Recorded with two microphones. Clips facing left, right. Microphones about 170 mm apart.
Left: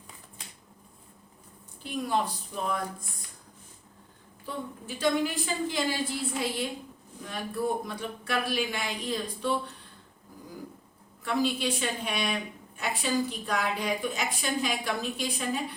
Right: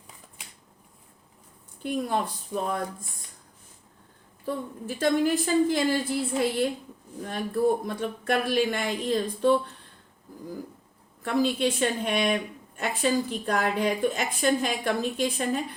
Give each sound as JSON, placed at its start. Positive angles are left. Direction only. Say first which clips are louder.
{"t": 1.8, "sound": "a woman's voice", "louder": "right 2 dB", "side_deg": -50}
{"t": 4.4, "sound": "a woman's voice", "louder": "right 5 dB", "side_deg": -50}
{"t": 11.2, "sound": "a woman's voice", "louder": "right 4 dB", "side_deg": -50}